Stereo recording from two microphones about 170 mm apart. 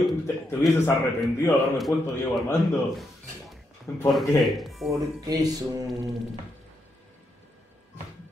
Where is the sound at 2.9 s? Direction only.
Centre (ahead or behind).